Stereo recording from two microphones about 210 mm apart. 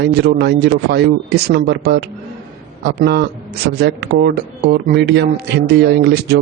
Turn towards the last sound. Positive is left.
turn(degrees=-50)  # may be behind; listen again after turning